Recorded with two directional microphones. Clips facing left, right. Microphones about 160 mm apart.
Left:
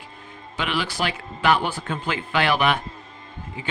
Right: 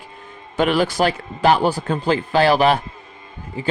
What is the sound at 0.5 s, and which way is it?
A man's voice, 45° right (ahead or behind).